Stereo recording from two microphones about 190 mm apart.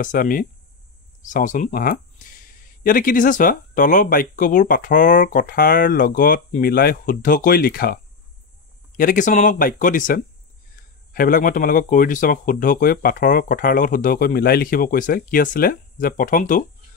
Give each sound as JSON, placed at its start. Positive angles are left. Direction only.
{"t": 0.0, "sound": "speech", "side_deg": 45}